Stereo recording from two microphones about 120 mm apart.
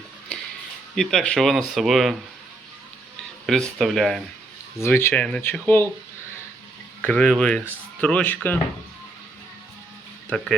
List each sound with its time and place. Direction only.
0.9 s speech: 5° left (ahead or behind)
3.4 s speech: 5° left (ahead or behind)
4.8 s speech: 20° left (ahead or behind)
7.0 s speech: 10° left (ahead or behind)
10.2 s speech: 5° left (ahead or behind)